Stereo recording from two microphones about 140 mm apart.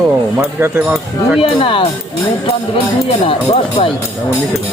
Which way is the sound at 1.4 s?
40° left (ahead or behind).